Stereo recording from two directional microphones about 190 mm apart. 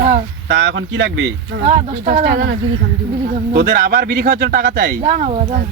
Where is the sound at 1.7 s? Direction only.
45° right (ahead or behind).